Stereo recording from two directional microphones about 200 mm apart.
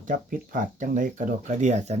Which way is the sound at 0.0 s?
40° right (ahead or behind).